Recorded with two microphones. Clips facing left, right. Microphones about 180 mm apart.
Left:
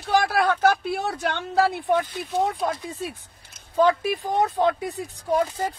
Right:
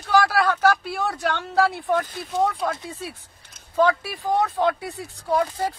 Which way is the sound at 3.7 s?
20° left (ahead or behind).